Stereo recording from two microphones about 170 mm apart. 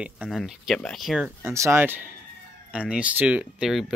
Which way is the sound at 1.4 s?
15° right (ahead or behind).